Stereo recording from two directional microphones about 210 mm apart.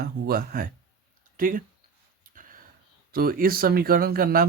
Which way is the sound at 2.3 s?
40° right (ahead or behind).